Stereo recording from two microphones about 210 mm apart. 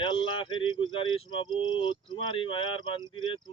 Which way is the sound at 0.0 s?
25° left (ahead or behind).